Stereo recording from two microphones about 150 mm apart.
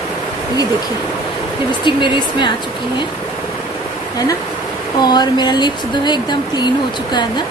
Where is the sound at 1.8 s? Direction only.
30° left (ahead or behind).